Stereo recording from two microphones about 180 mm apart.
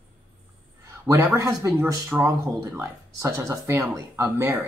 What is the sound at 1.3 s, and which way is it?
Speech, 15° right (ahead or behind).